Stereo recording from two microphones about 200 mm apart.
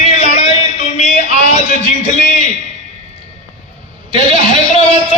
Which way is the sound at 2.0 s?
40° left (ahead or behind).